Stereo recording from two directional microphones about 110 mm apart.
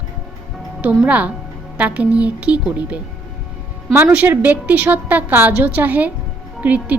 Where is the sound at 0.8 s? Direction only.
15° right (ahead or behind).